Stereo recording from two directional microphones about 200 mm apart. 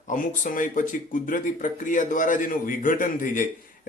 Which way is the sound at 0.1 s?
40° left (ahead or behind).